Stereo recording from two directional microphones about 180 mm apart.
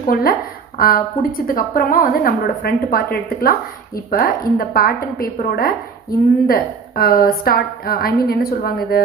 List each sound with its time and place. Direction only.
0.0 s a woman's voice: 55° left (ahead or behind)